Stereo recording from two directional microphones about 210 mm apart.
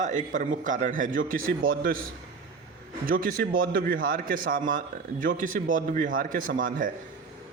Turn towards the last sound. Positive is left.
turn(degrees=-40)  # may be behind; listen again after turning